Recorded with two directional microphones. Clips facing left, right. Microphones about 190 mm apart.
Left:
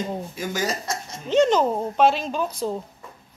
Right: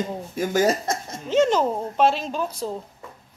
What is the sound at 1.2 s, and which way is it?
Speech, 5° right (ahead or behind).